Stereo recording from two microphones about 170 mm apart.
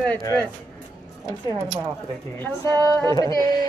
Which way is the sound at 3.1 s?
20° left (ahead or behind).